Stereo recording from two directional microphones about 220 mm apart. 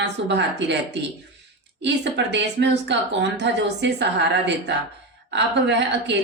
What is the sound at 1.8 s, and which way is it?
A woman's voice, 50° right (ahead or behind).